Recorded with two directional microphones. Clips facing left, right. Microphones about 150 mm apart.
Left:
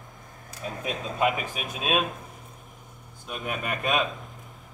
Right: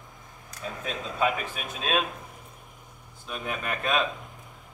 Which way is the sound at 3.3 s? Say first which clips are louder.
Left 1 dB; 10° left (ahead or behind).